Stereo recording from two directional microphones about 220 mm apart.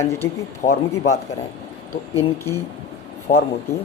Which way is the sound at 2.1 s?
10° left (ahead or behind).